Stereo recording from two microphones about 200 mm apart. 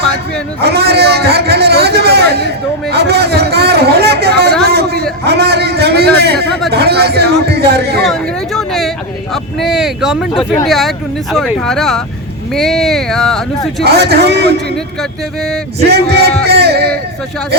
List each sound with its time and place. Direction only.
0.6 s a sound: 55° right (ahead or behind)
6.7 s speech: 55° right (ahead or behind)
8.0 s a sound: centre (ahead or behind)
9.3 s speech: centre (ahead or behind)
13.8 s a man's voice: 55° right (ahead or behind)
15.4 s speech: centre (ahead or behind)
15.9 s a man's voice: 55° right (ahead or behind)